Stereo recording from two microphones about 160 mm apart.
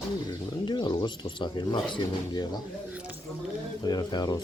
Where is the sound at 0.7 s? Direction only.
30° left (ahead or behind).